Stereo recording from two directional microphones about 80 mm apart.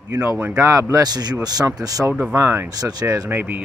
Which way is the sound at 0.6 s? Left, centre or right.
Right.